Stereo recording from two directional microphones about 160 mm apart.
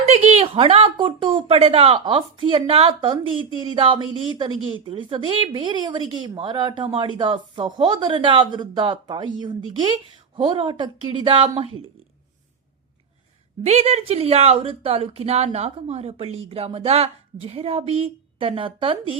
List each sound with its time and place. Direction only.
0.0 s a woman's voice: 45° right (ahead or behind)
13.7 s a woman's voice: 45° right (ahead or behind)